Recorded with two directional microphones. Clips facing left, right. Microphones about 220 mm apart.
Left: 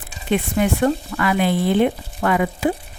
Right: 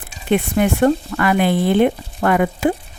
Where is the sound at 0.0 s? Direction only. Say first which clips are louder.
Right 3 dB; 55° right (ahead or behind).